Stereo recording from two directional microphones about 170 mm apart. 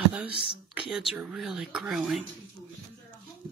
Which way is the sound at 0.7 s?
5° right (ahead or behind).